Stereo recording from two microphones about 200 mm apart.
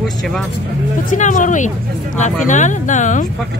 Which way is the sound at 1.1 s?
40° left (ahead or behind).